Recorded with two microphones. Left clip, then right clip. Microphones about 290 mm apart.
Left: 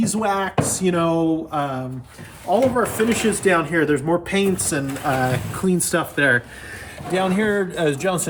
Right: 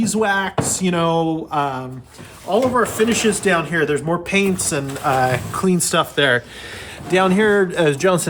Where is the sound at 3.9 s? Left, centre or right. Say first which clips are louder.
Even; right.